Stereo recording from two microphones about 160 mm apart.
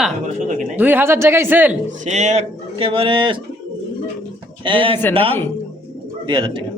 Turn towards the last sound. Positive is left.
turn(degrees=-30)  # may be behind; listen again after turning